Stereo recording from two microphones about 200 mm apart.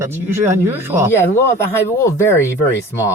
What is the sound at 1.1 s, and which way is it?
Speech, 10° left (ahead or behind).